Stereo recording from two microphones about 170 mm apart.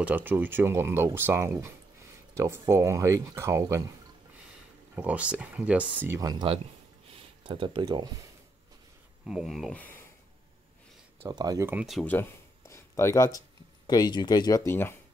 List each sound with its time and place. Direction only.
0.0 s speech: 10° right (ahead or behind)
4.9 s speech: 10° right (ahead or behind)
9.2 s speech: centre (ahead or behind)
11.2 s speech: 20° right (ahead or behind)
11.8 s speech: centre (ahead or behind)
12.1 s a sound: 15° left (ahead or behind)
13.8 s speech: 25° left (ahead or behind)